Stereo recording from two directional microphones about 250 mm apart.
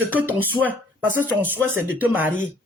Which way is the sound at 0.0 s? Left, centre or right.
Centre.